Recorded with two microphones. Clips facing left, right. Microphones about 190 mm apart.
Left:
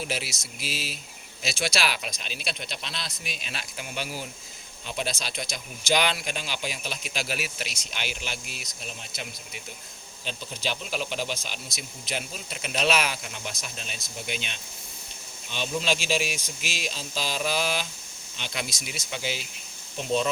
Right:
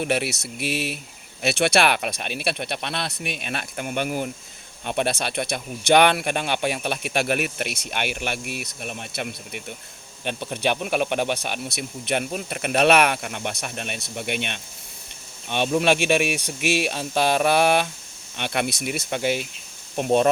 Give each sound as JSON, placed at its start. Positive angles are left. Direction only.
{"t": 0.0, "sound": "speech", "side_deg": -60}